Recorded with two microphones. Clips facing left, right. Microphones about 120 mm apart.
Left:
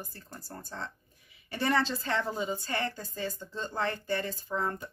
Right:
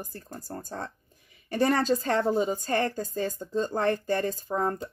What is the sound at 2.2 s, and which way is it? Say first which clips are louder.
Speech: right 7 dB; 35° right (ahead or behind).